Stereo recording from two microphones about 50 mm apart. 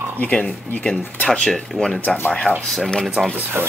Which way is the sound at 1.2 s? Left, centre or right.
Centre.